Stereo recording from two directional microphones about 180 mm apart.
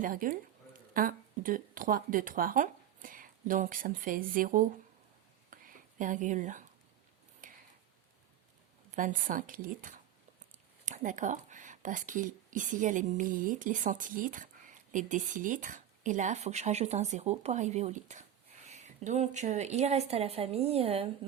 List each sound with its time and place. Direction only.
0.0 s speech: 50° right (ahead or behind)
5.5 s a sound: 50° right (ahead or behind)
9.0 s a woman's voice: 45° right (ahead or behind)